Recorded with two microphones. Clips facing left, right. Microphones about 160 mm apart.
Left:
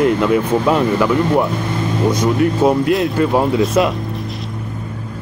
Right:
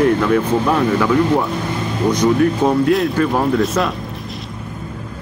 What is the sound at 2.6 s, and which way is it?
Speech, 5° left (ahead or behind).